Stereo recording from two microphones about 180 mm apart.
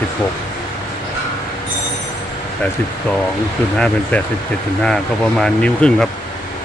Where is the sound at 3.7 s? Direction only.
5° left (ahead or behind).